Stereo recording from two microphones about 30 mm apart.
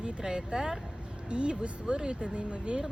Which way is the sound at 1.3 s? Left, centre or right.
Right.